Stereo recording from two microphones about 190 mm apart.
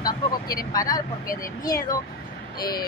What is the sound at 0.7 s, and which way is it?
Speech, 20° left (ahead or behind).